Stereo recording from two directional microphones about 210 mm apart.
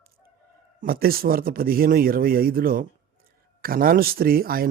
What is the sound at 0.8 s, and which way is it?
Speech, 45° right (ahead or behind).